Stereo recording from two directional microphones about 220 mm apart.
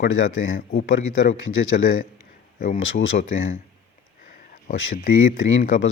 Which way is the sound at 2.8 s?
65° left (ahead or behind).